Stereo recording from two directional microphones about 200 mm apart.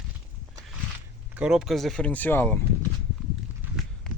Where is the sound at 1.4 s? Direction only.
5° right (ahead or behind).